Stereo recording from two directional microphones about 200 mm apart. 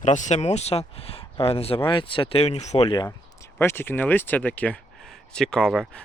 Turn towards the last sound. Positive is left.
turn(degrees=0)  # may be behind; listen again after turning